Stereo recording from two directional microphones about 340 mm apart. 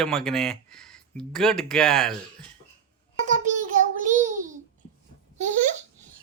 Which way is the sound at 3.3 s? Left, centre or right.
Right.